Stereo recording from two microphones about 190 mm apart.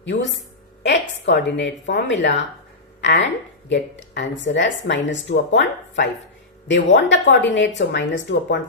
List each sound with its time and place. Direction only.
0.0 s a woman's voice: 75° left (ahead or behind)